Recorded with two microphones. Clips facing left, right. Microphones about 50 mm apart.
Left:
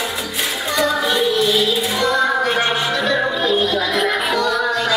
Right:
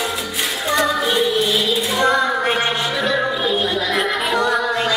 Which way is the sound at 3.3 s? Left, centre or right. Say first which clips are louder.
Left 2 dB; centre.